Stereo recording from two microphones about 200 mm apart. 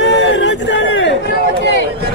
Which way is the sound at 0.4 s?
65° left (ahead or behind).